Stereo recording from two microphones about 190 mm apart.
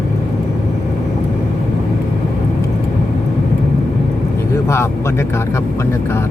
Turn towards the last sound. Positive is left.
turn(degrees=15)  # may be behind; listen again after turning